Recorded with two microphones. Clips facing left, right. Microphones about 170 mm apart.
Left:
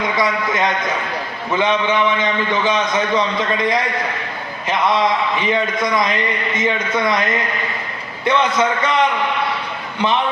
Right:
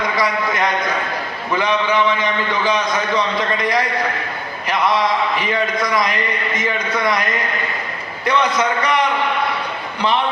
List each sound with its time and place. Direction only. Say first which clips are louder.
0.2 s a man's voice: left 1 dB; 25° left (ahead or behind)
5.8 s a man's voice: left 1 dB; 25° left (ahead or behind)